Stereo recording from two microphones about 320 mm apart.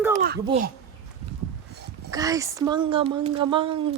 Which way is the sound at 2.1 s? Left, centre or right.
Centre.